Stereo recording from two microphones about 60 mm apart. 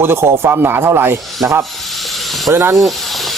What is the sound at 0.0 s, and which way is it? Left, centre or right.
Speech, right.